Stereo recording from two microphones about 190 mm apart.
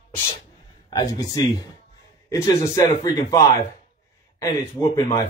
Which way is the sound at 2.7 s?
20° left (ahead or behind).